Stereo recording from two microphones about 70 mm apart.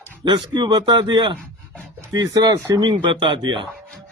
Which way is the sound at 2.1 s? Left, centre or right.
Right.